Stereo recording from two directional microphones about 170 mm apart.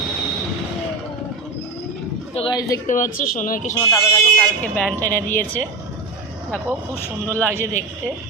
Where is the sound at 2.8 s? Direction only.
50° left (ahead or behind).